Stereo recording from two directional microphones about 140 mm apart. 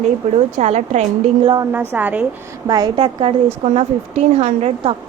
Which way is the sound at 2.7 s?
35° right (ahead or behind).